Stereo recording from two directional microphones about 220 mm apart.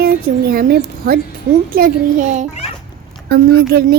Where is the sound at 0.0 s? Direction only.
40° right (ahead or behind).